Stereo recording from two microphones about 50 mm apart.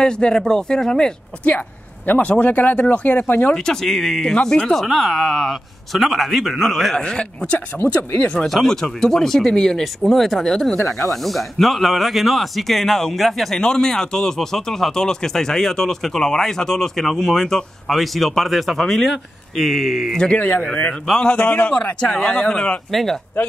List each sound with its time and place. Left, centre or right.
0.0 s a man's voice: centre; by 3.5 s left
3.5 s speech: centre
4.7 s speech: centre
7.0 s speech: centre
8.5 s speech: centre
10.8 s speech: left
11.1 s speech: centre
13.6 s speech: centre
20.1 s speech: centre
20.3 s speech: left
20.6 s a man's voice: left
22.8 s speech: centre